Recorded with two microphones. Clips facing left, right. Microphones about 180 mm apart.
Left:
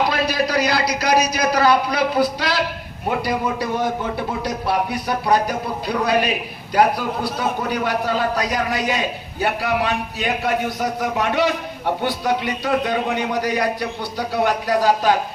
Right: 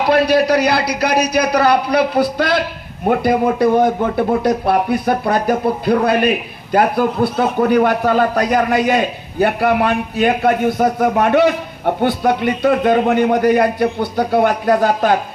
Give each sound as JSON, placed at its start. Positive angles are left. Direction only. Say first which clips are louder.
{"t": 0.1, "sound": "a man's voice", "louder": "right 8 dB", "side_deg": -65}